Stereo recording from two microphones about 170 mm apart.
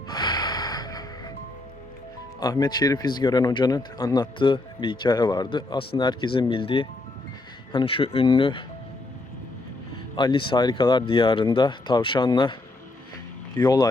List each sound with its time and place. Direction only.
0.1 s music: 25° left (ahead or behind)
2.4 s speech: 25° left (ahead or behind)
10.2 s speech: 30° left (ahead or behind)
13.6 s speech: 20° left (ahead or behind)